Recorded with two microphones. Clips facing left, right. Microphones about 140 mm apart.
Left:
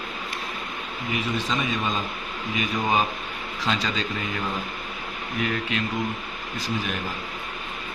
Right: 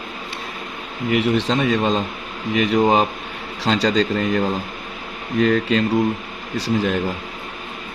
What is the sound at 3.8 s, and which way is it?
Speech, 90° right.